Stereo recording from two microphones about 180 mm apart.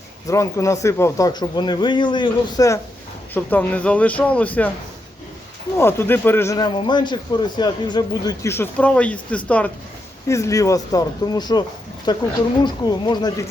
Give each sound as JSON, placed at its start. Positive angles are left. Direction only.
{"t": 0.3, "sound": "speech", "side_deg": 15}
{"t": 3.3, "sound": "a man's voice", "side_deg": 10}
{"t": 5.7, "sound": "a man's voice", "side_deg": 15}